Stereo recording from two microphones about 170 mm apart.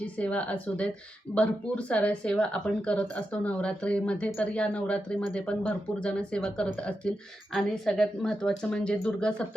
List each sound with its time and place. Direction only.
0.0 s a woman's voice: 10° left (ahead or behind)